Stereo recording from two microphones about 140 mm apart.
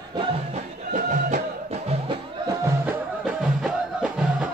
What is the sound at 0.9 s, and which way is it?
Music, 70° right (ahead or behind).